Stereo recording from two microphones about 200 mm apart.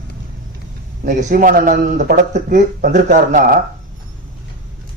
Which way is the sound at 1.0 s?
40° right (ahead or behind).